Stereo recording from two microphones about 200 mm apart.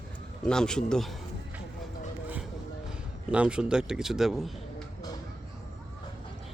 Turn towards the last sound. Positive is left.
turn(degrees=0)  # may be behind; listen again after turning